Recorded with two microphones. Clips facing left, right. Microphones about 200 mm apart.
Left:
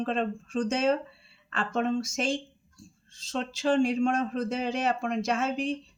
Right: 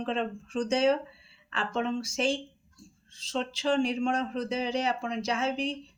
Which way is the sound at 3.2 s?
45° left (ahead or behind).